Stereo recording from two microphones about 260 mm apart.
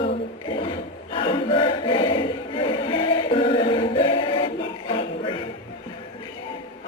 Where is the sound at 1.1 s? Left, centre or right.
Centre.